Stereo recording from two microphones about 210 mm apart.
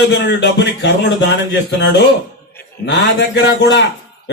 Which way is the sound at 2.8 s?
55° left (ahead or behind).